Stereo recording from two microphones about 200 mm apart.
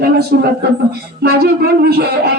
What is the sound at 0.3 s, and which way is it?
A woman's voice, 50° right (ahead or behind).